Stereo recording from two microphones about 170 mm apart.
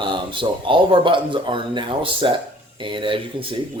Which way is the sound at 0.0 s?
30° right (ahead or behind).